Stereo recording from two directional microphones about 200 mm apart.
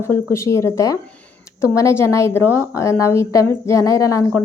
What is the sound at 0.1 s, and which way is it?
A woman's voice, 15° left (ahead or behind).